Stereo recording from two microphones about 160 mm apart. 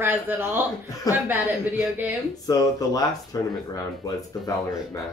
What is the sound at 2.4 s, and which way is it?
Speech, 25° left (ahead or behind).